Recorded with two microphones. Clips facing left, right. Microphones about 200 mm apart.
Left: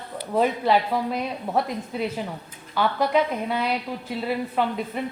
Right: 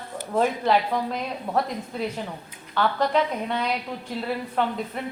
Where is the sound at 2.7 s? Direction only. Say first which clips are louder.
Left 1 dB; 10° left (ahead or behind).